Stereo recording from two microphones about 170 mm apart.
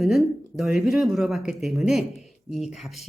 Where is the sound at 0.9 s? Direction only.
Centre (ahead or behind).